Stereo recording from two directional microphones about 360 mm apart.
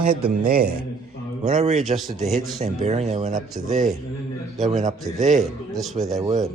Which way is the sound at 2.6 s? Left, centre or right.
Centre.